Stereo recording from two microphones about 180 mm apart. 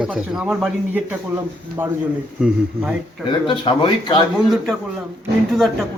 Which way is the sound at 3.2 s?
30° left (ahead or behind).